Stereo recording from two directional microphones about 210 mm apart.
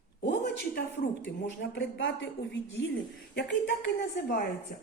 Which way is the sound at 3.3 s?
55° left (ahead or behind).